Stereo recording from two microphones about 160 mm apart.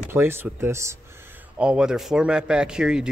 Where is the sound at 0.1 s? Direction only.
15° right (ahead or behind).